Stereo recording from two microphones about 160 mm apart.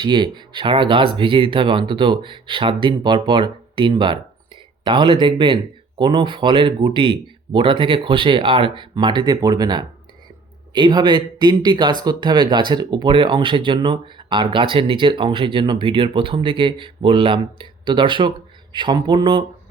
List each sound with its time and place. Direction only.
0.0 s speech: 30° right (ahead or behind)